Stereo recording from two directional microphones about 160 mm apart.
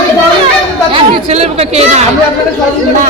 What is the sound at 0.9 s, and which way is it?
Chatter, 40° right (ahead or behind).